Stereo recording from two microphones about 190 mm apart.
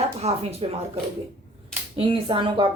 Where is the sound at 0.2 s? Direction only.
30° right (ahead or behind).